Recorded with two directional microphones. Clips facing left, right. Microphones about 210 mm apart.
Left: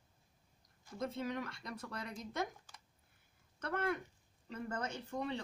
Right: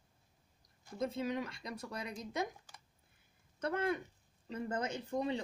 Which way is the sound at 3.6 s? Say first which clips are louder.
Right 3 dB; 15° right (ahead or behind).